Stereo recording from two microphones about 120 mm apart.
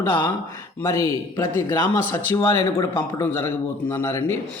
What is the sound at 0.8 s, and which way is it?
Speech, 30° left (ahead or behind).